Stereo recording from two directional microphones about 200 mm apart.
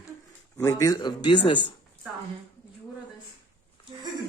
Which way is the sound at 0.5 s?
15° left (ahead or behind).